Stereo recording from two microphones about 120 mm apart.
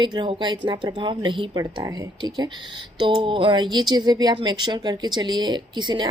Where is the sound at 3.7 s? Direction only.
35° right (ahead or behind).